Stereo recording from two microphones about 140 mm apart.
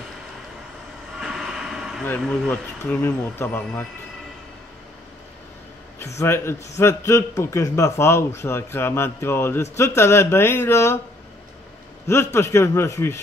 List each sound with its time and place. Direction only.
1.1 s vehicle: 5° right (ahead or behind)
2.0 s speech: 5° left (ahead or behind)
5.9 s a man's voice: 20° left (ahead or behind)
12.1 s a man's voice: 20° left (ahead or behind)